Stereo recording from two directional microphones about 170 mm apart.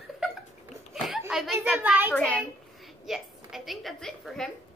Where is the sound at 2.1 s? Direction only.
5° left (ahead or behind).